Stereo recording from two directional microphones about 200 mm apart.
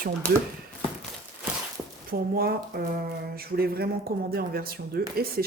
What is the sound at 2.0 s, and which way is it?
Speech, 50° right (ahead or behind).